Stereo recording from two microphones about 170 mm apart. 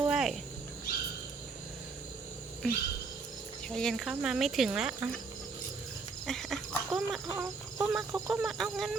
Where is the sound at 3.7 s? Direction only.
Centre (ahead or behind).